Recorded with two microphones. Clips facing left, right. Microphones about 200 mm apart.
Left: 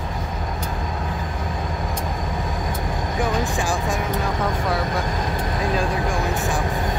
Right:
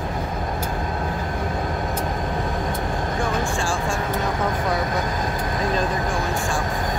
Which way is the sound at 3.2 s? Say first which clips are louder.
Left 3 dB; 15° left (ahead or behind).